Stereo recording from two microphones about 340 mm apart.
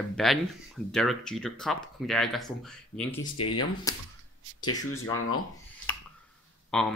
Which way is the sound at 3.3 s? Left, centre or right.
Left.